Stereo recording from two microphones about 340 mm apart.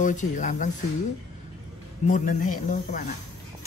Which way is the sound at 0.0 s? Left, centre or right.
Left.